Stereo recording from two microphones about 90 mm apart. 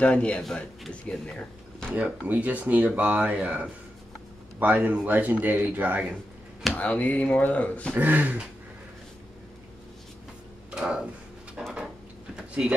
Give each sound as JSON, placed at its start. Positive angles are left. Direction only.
{"t": 0.0, "sound": "speech", "side_deg": 10}
{"t": 2.0, "sound": "speech", "side_deg": -15}
{"t": 6.7, "sound": "speech", "side_deg": 15}
{"t": 7.9, "sound": "speech", "side_deg": -20}
{"t": 10.7, "sound": "a sound", "side_deg": -10}